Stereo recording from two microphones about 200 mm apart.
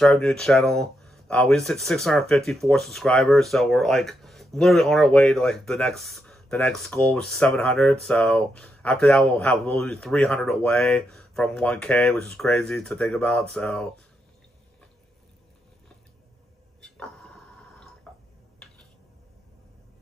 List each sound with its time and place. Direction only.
0.0 s speech: centre (ahead or behind)
16.8 s a sound: 5° left (ahead or behind)
18.1 s drip: 5° left (ahead or behind)